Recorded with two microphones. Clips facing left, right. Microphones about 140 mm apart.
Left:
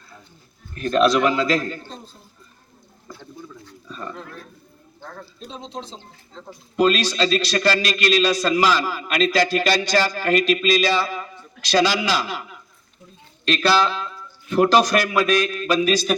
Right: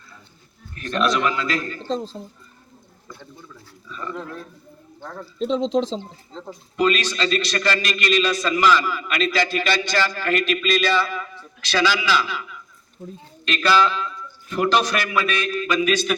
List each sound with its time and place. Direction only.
1.0 s a man's voice: 35° left (ahead or behind)
1.8 s speech: 90° right
5.5 s speech: 90° right
6.7 s a man's voice: 35° left (ahead or behind)
13.0 s a man's voice: 45° right (ahead or behind)
13.4 s a man's voice: 35° left (ahead or behind)